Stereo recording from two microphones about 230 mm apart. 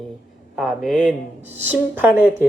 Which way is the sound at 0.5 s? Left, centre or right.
Centre.